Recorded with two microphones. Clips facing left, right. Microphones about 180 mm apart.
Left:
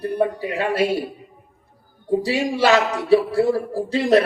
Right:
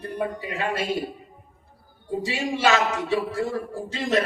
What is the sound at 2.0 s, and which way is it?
Speech, 35° left (ahead or behind).